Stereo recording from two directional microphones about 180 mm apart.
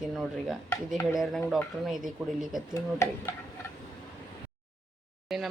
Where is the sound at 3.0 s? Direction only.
15° left (ahead or behind).